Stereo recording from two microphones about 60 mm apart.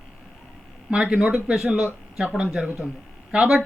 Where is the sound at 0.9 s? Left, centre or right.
Centre.